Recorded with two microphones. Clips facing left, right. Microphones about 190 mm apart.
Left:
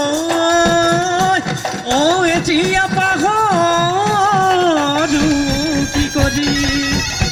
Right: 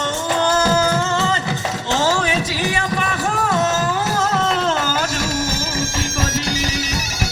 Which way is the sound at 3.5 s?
50° left (ahead or behind).